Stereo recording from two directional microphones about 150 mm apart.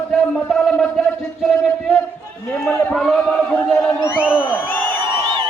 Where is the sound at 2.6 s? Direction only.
5° left (ahead or behind).